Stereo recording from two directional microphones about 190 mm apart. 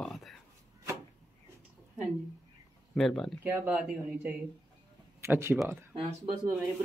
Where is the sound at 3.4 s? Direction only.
10° right (ahead or behind).